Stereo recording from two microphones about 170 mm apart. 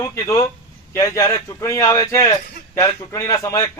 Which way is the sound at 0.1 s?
20° left (ahead or behind).